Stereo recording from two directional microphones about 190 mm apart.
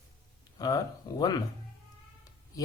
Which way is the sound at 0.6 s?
20° left (ahead or behind).